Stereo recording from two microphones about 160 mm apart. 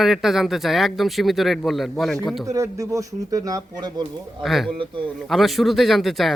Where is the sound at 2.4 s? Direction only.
20° right (ahead or behind).